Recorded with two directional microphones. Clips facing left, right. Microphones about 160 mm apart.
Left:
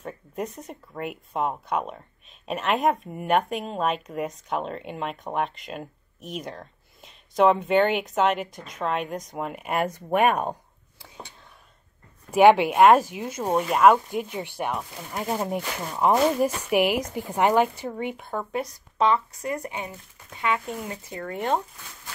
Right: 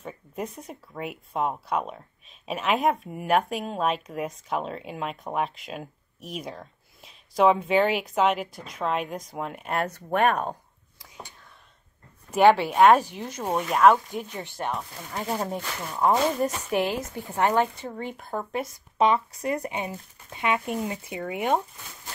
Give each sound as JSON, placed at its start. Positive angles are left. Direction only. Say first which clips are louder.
{"t": 0.0, "sound": "speech", "louder": "left 2 dB", "side_deg": 0}
{"t": 12.4, "sound": "speech", "louder": "left 2 dB", "side_deg": 15}
{"t": 18.9, "sound": "speech", "louder": "even", "side_deg": -25}
{"t": 21.2, "sound": "speech", "louder": "right 1 dB", "side_deg": -5}